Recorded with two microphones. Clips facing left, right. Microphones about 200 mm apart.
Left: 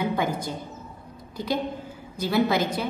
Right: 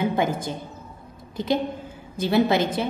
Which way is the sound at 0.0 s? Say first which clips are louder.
Right 3 dB; 25° right (ahead or behind).